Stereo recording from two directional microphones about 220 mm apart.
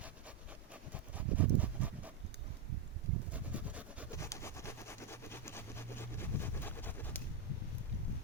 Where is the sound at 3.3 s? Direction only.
5° right (ahead or behind).